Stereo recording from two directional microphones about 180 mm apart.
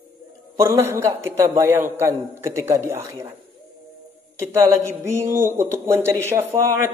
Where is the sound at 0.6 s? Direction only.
15° right (ahead or behind).